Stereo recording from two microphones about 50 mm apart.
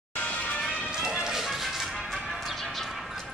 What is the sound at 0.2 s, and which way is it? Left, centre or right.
Music, left.